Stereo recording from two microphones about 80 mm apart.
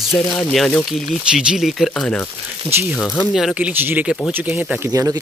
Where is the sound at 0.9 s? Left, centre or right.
Centre.